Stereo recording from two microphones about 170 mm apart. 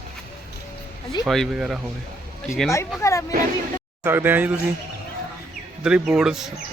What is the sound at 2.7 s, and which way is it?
Speech, 15° left (ahead or behind).